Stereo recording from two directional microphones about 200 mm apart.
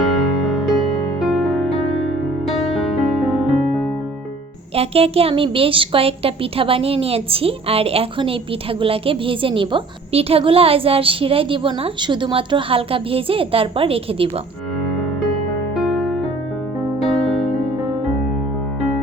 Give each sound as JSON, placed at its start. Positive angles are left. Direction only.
{"t": 0.4, "sound": "music", "side_deg": 0}
{"t": 4.7, "sound": "a woman's voice", "side_deg": -30}
{"t": 15.8, "sound": "music", "side_deg": 0}